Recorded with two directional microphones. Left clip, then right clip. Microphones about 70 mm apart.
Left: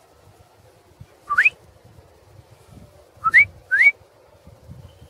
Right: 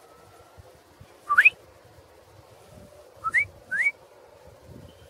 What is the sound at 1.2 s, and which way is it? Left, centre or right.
Whistling, centre.